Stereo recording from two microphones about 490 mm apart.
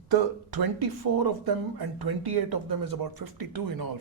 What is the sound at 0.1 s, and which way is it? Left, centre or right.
Speech, right.